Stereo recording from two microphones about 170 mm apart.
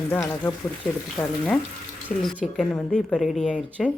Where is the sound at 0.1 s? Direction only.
15° left (ahead or behind).